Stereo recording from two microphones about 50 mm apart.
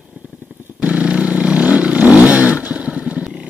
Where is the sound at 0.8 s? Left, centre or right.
Right.